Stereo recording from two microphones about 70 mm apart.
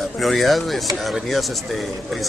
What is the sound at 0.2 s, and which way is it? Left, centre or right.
A man's voice, centre.